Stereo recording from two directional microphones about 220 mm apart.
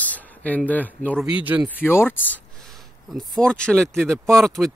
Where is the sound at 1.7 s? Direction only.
10° left (ahead or behind).